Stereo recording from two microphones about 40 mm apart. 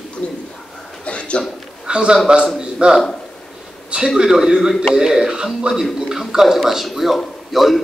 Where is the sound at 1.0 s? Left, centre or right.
Left.